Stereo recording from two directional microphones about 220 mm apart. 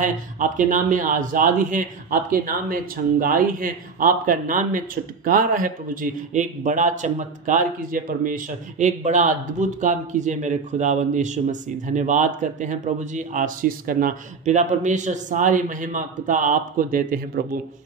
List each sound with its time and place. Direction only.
0.0 s speech: 35° right (ahead or behind)